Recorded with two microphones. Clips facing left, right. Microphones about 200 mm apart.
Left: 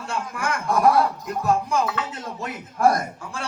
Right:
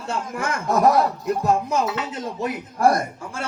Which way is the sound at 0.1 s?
25° right (ahead or behind).